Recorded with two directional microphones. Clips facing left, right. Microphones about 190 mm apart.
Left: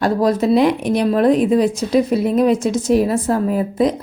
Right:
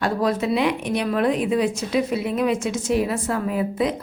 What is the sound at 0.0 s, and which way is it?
A woman's voice, 40° left (ahead or behind).